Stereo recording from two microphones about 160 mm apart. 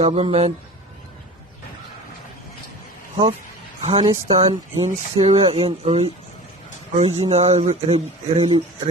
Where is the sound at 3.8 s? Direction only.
35° right (ahead or behind).